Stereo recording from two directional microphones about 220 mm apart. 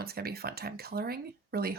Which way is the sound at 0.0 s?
45° right (ahead or behind).